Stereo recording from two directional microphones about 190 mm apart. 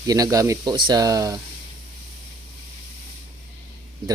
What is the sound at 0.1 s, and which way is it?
Speech, 15° right (ahead or behind).